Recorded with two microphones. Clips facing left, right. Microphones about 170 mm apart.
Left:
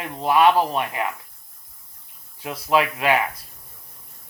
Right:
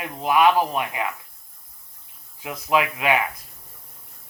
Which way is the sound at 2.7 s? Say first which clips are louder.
Left 1 dB; 15° right (ahead or behind).